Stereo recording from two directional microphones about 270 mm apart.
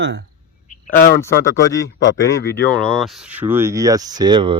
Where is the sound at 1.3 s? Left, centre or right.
Left.